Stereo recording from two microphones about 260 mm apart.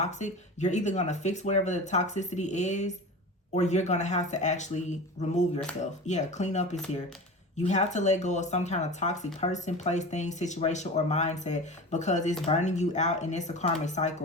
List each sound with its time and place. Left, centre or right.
0.0 s speech: left